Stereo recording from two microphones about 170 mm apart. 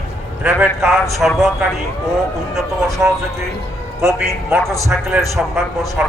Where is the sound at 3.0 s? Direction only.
10° right (ahead or behind).